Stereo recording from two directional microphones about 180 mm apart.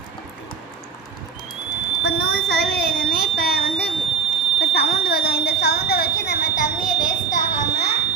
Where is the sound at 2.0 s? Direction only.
60° left (ahead or behind).